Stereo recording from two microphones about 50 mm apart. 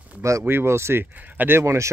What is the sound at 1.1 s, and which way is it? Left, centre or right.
Speech, right.